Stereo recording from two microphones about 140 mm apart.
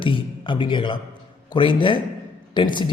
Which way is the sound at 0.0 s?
35° left (ahead or behind).